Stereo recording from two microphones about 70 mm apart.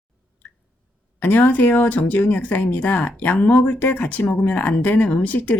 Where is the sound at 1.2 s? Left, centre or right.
Left.